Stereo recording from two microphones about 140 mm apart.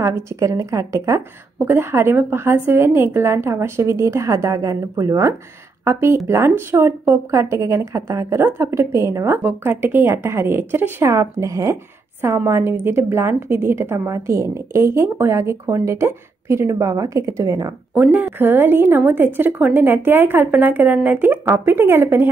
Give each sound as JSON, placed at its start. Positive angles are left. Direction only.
{"t": 0.0, "sound": "speech", "side_deg": -20}
{"t": 18.0, "sound": "a woman's voice", "side_deg": -15}